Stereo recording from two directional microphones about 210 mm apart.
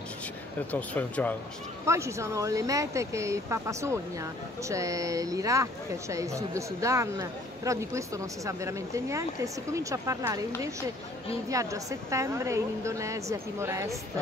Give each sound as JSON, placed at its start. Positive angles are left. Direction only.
{"t": 0.7, "sound": "speech", "side_deg": 5}
{"t": 1.9, "sound": "speech", "side_deg": -15}
{"t": 11.4, "sound": "speech", "side_deg": -15}